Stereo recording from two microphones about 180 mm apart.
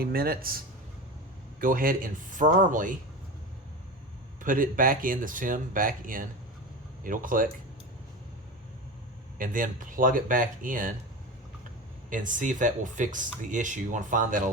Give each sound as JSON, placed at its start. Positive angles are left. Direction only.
{"t": 0.0, "sound": "speech", "side_deg": -55}
{"t": 1.6, "sound": "speech", "side_deg": -50}
{"t": 4.4, "sound": "speech", "side_deg": -50}
{"t": 9.4, "sound": "speech", "side_deg": -50}
{"t": 12.1, "sound": "speech", "side_deg": -45}